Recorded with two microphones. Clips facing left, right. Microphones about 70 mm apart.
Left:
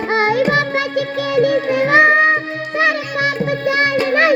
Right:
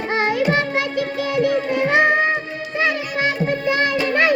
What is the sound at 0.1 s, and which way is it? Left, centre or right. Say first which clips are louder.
Music: left 4 dB; left.